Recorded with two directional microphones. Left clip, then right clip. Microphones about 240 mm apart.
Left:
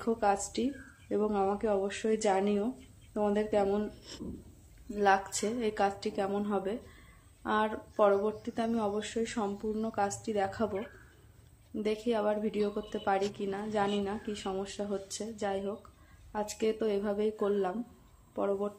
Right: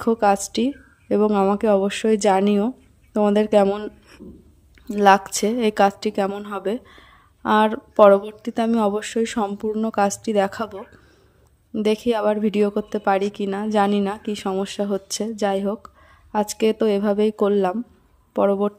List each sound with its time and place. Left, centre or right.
0.0 s a woman's voice: right